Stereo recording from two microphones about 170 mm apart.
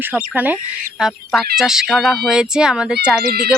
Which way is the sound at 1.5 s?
5° right (ahead or behind).